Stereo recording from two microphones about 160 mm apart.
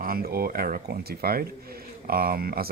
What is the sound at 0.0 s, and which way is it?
Speech, 65° right (ahead or behind).